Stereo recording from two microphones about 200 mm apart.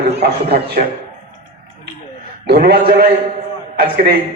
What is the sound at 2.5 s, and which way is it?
A man's voice, 50° right (ahead or behind).